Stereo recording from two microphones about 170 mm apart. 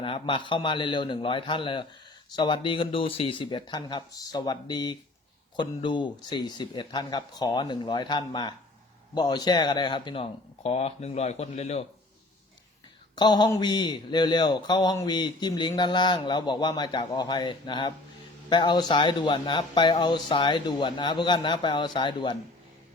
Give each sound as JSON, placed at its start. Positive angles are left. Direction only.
{"t": 0.0, "sound": "speech", "side_deg": 30}
{"t": 13.1, "sound": "speech", "side_deg": 25}